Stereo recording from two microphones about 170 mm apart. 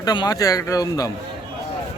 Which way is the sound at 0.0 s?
25° left (ahead or behind).